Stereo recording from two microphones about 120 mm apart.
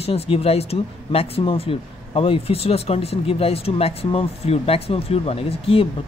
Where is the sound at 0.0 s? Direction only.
55° left (ahead or behind).